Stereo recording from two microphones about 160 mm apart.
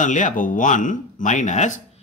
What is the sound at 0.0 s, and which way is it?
A man's voice, 50° left (ahead or behind).